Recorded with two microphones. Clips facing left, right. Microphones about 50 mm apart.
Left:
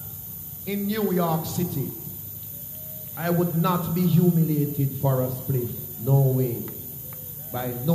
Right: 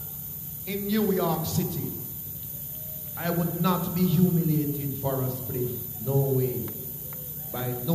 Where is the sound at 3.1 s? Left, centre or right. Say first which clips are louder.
Left 4 dB; centre.